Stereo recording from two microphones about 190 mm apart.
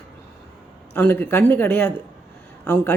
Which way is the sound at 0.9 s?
10° left (ahead or behind).